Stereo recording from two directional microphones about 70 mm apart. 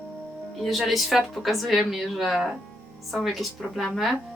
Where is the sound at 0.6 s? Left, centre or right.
Centre.